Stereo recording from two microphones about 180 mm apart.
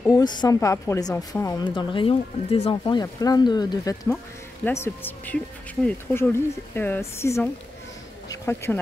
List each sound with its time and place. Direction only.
0.1 s a woman's voice: 25° left (ahead or behind)